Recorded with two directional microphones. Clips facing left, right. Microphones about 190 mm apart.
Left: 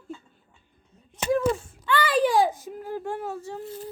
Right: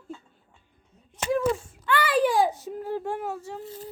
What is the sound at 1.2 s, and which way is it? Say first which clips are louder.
Speech: left 1 dB; 5° right (ahead or behind).